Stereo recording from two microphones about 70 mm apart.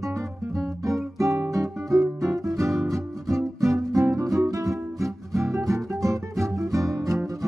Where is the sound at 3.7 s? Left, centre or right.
Right.